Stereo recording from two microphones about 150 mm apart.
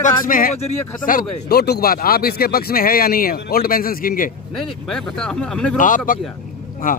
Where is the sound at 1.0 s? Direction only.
80° left.